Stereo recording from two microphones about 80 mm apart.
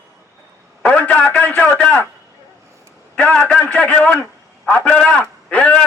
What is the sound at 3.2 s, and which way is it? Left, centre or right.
A man's voice, centre.